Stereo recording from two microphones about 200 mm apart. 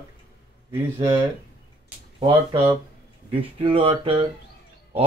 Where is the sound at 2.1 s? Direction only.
25° right (ahead or behind).